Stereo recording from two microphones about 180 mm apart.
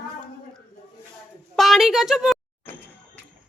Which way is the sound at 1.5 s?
Centre (ahead or behind).